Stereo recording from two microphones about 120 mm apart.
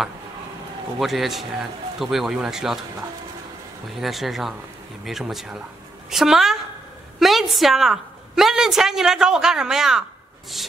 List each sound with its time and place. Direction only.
0.9 s speech: centre (ahead or behind)
4.0 s a woman's voice: centre (ahead or behind)